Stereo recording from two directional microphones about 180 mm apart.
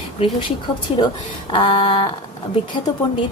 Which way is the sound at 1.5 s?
30° left (ahead or behind).